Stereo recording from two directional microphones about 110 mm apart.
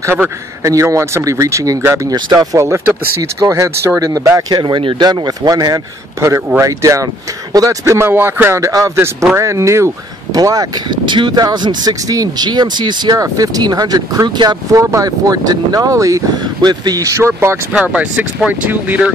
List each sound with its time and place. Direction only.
0.7 s speech: 25° right (ahead or behind)
2.3 s speech: 25° right (ahead or behind)
14.8 s speech: 30° right (ahead or behind)
17.7 s speech: 10° right (ahead or behind)